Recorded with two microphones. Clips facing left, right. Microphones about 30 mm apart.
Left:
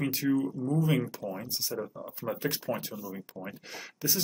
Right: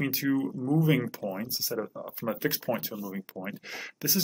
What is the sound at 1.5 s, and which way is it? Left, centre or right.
Speech, centre.